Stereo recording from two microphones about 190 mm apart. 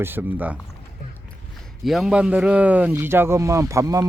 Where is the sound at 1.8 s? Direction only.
Centre (ahead or behind).